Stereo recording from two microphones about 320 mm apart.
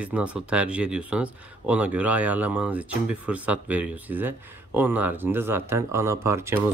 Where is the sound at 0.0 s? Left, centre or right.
Centre.